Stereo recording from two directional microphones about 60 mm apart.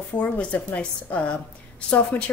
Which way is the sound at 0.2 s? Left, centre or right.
Left.